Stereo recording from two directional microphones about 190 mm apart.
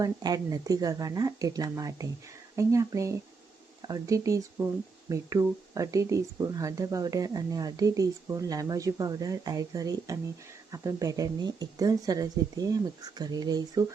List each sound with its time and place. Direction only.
0.0 s speech: 20° right (ahead or behind)